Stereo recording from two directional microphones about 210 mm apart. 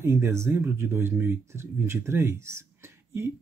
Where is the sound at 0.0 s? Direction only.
10° right (ahead or behind).